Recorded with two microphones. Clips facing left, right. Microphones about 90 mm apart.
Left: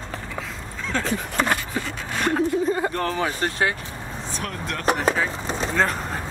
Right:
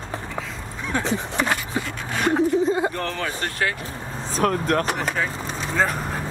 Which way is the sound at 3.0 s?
5° left (ahead or behind).